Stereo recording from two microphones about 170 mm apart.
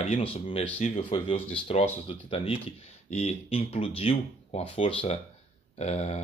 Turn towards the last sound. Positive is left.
turn(degrees=40)  # may be behind; listen again after turning